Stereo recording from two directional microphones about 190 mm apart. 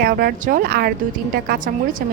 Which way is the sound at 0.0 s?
50° right (ahead or behind).